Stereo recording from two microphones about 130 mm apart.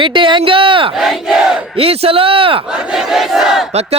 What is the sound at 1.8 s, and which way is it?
Speech, 50° right (ahead or behind).